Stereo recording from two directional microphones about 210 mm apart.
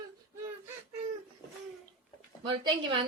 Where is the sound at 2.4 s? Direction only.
25° right (ahead or behind).